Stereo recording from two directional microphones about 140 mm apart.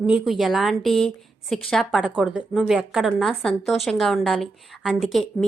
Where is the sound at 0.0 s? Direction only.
5° right (ahead or behind).